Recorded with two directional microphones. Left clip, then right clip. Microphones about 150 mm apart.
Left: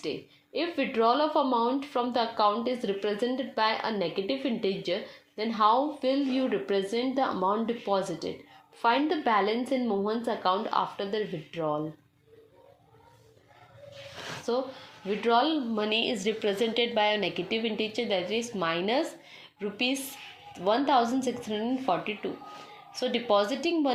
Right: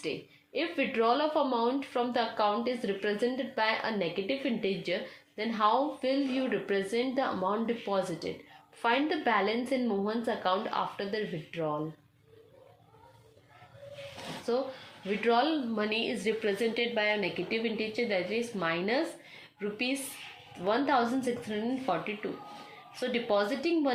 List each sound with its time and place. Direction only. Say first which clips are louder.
0.5 s speech: left 2 dB; 35° left (ahead or behind)
14.5 s a woman's voice: left 1 dB; 35° left (ahead or behind)